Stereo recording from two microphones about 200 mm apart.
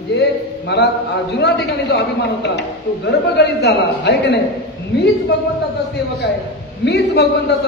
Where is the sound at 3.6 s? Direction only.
55° left (ahead or behind).